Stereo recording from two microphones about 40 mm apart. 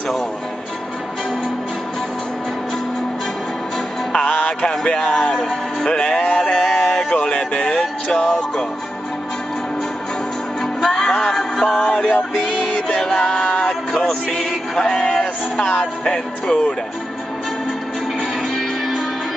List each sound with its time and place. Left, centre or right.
4.1 s music: left
5.9 s music: left
6.6 s a sound: centre
7.2 s music: left
10.6 s music: centre
12.4 s music: centre
12.8 s music: centre